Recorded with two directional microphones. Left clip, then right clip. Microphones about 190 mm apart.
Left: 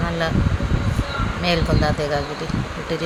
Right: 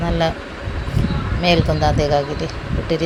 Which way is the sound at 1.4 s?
20° right (ahead or behind).